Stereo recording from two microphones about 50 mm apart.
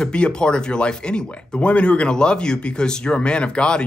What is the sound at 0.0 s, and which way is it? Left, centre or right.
Speech, centre.